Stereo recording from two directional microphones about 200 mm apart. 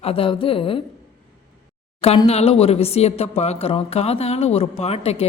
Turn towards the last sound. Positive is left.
turn(degrees=30)  # may be behind; listen again after turning